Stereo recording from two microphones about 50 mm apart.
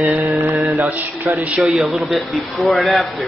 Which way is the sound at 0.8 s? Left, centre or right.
Right.